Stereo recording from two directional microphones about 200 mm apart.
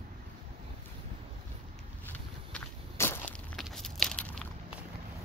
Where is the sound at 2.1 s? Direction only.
10° left (ahead or behind).